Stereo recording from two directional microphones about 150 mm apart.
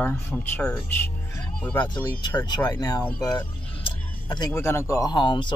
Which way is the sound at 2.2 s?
30° left (ahead or behind).